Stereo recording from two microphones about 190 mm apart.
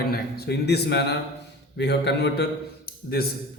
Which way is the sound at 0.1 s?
55° left (ahead or behind).